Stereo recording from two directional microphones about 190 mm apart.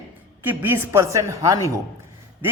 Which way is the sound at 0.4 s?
10° right (ahead or behind).